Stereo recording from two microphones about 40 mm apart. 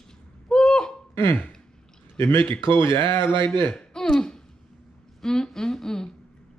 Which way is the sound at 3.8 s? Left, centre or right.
Centre.